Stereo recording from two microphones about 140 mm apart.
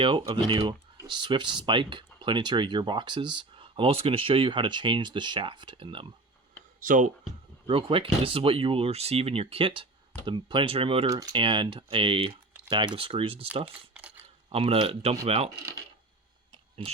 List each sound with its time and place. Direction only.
0.0 s speech: 35° right (ahead or behind)
6.7 s speech: 70° right (ahead or behind)
7.7 s speech: 40° right (ahead or behind)
11.1 s speech: 30° right (ahead or behind)
13.9 s a sound: 10° right (ahead or behind)
14.5 s speech: 45° right (ahead or behind)
15.4 s coin: 25° right (ahead or behind)
16.8 s speech: 40° right (ahead or behind)